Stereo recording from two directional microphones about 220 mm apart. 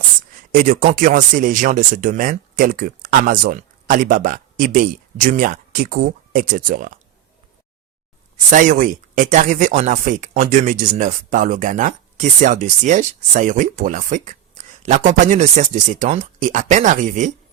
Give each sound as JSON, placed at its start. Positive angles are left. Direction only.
{"t": 0.5, "sound": "speech", "side_deg": -40}
{"t": 8.4, "sound": "speech", "side_deg": -35}